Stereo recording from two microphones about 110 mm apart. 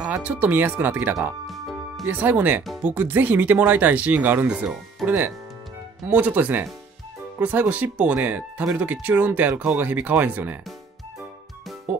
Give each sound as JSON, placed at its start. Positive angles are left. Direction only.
{"t": 0.2, "sound": "speech", "side_deg": -15}
{"t": 1.5, "sound": "music", "side_deg": 0}
{"t": 2.0, "sound": "speech", "side_deg": -15}